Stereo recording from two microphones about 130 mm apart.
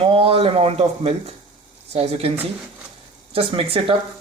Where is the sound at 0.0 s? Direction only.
45° right (ahead or behind).